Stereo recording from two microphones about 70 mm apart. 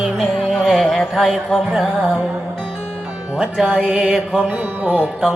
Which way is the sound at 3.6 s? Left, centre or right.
Centre.